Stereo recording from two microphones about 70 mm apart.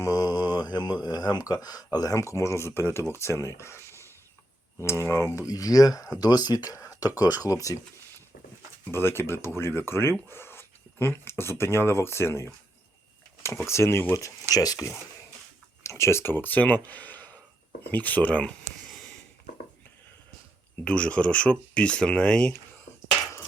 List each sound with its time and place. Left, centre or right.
0.0 s speech: left
5.5 s speech: left
6.1 s speech: left
6.7 s a sound: left
7.4 s speech: left
8.9 s speech: left
13.7 s speech: left
14.5 s speech: left
15.8 s speech: left; by 18.5 s centre
20.8 s speech: centre